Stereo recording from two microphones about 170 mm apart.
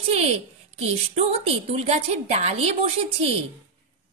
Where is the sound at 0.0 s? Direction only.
35° right (ahead or behind).